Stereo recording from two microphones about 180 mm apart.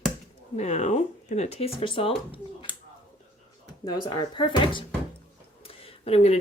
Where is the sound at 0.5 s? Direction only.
40° left (ahead or behind).